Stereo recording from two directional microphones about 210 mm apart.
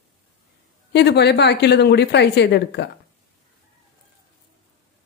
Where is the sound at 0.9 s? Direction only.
50° left (ahead or behind).